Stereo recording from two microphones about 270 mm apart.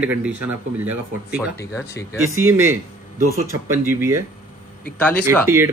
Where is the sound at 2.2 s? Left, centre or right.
Right.